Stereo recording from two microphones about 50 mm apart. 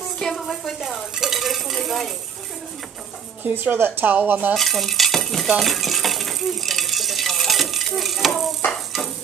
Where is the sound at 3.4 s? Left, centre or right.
Right.